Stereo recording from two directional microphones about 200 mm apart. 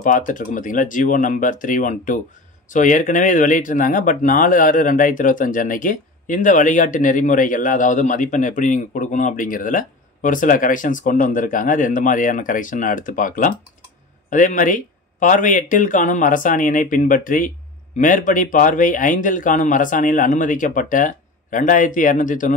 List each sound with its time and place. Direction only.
0.0 s speech: 40° left (ahead or behind)